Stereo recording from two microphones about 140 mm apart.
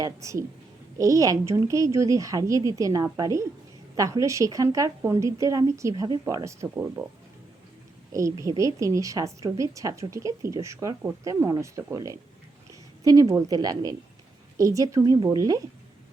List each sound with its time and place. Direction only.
0.0 s a woman's voice: 20° right (ahead or behind)
8.1 s a woman's voice: 20° right (ahead or behind)